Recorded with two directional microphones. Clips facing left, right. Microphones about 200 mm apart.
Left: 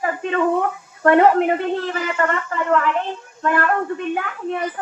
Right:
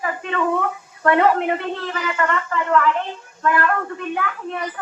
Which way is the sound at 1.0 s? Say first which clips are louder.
Left 3 dB; 35° left (ahead or behind).